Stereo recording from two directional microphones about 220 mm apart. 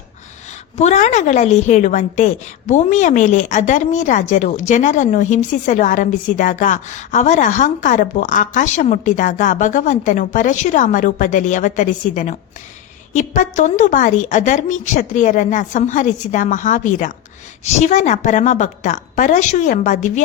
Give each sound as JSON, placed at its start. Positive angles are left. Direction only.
{"t": 0.8, "sound": "a woman's voice", "side_deg": 30}